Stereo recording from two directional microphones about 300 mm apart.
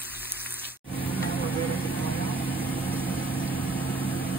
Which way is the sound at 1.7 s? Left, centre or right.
Centre.